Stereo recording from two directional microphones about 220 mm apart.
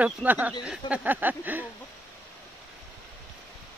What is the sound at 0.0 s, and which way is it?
Speech, 5° right (ahead or behind).